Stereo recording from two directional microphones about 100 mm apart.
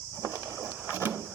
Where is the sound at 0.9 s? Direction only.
20° right (ahead or behind).